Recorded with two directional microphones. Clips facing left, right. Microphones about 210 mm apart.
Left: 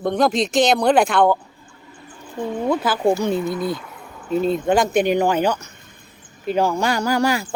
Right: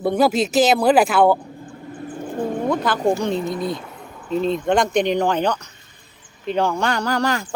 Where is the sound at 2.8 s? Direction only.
5° left (ahead or behind).